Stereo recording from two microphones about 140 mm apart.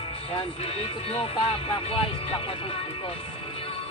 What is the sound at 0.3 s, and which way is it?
Speech, 45° left (ahead or behind).